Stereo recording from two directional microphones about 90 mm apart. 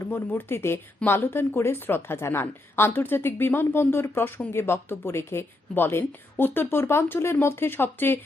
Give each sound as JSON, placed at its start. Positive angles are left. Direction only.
{"t": 0.0, "sound": "a woman's voice", "side_deg": 25}